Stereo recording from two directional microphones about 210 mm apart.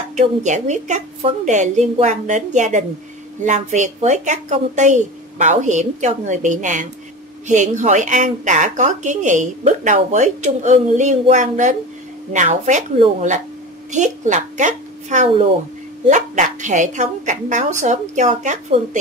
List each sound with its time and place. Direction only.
0.1 s a woman's voice: 35° right (ahead or behind)